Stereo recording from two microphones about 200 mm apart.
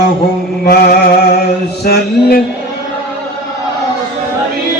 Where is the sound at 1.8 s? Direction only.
50° left (ahead or behind).